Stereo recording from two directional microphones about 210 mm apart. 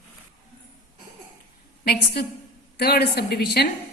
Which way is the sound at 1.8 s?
50° left (ahead or behind).